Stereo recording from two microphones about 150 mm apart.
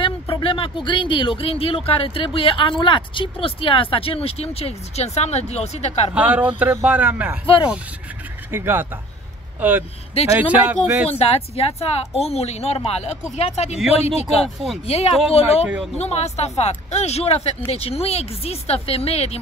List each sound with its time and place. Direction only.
0.0 s speech: 35° left (ahead or behind)
6.1 s speech: 10° right (ahead or behind)
7.4 s speech: 35° left (ahead or behind)
8.5 s speech: 15° right (ahead or behind)
11.1 s speech: 45° left (ahead or behind)
15.6 s speech: 10° right (ahead or behind)
16.0 s speech: 45° left (ahead or behind)